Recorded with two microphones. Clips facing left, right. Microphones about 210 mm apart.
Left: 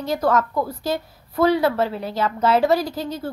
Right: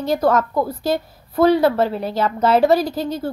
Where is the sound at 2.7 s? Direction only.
65° right (ahead or behind).